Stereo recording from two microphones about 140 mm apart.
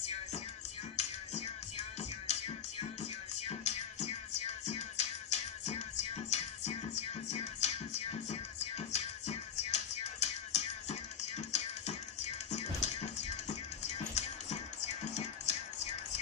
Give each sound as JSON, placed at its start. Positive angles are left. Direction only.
{"t": 0.9, "sound": "music", "side_deg": 50}